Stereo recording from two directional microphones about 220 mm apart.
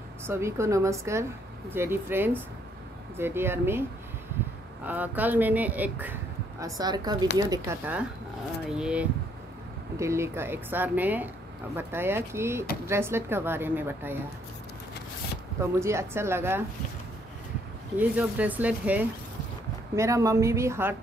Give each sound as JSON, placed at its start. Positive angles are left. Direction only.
{"t": 0.3, "sound": "a woman's voice", "side_deg": -10}
{"t": 4.8, "sound": "a woman's voice", "side_deg": -10}
{"t": 6.6, "sound": "a woman's voice", "side_deg": -20}
{"t": 15.6, "sound": "a woman's voice", "side_deg": -10}
{"t": 17.9, "sound": "a woman's voice", "side_deg": -5}